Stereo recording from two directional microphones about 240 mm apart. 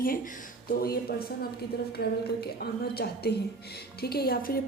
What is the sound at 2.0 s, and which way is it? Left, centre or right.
A woman's voice, left.